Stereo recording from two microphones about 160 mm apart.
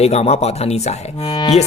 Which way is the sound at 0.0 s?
40° left (ahead or behind).